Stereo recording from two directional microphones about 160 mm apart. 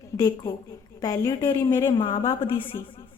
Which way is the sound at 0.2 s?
25° left (ahead or behind).